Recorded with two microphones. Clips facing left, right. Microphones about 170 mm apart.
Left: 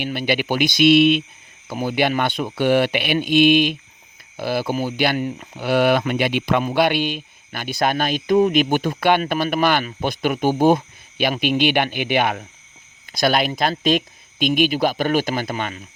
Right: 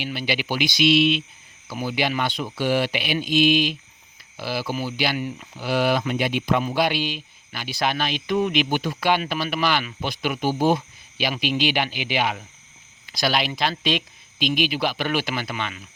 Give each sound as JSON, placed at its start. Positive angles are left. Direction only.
{"t": 0.0, "sound": "speech", "side_deg": 55}
{"t": 6.7, "sound": "speech", "side_deg": 60}